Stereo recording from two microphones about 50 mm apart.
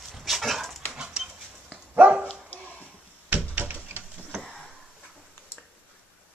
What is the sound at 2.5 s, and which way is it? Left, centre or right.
Dog, left.